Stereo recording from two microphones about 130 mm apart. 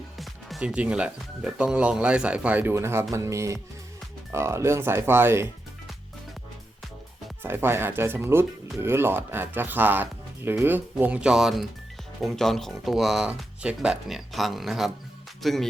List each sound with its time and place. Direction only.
0.2 s speech: centre (ahead or behind); by 5.5 s 20° right (ahead or behind)
7.4 s speech: 15° right (ahead or behind); by 15.6 s centre (ahead or behind)